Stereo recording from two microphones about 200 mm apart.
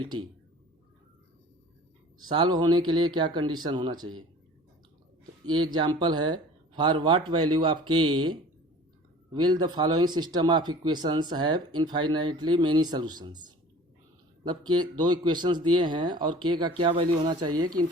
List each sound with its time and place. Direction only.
0.0 s speech: 25° right (ahead or behind)
2.2 s speech: 20° right (ahead or behind)
5.5 s speech: 20° right (ahead or behind)